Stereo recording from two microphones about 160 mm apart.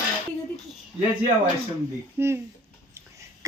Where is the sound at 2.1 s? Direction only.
15° right (ahead or behind).